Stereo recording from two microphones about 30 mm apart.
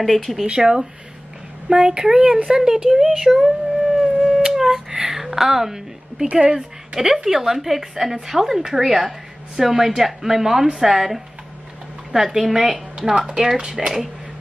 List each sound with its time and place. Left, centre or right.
0.0 s speech: centre
0.5 s speech: right
1.7 s speech: right
2.3 s a sound: right
5.0 s a woman's voice: centre
6.4 s speech: right
7.2 s a woman's voice: centre